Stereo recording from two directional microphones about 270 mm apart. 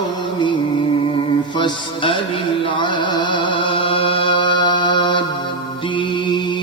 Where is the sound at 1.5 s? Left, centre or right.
Centre.